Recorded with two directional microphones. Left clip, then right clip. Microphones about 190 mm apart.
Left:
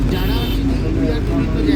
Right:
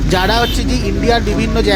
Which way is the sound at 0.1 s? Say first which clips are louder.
Right 14 dB; 50° right (ahead or behind).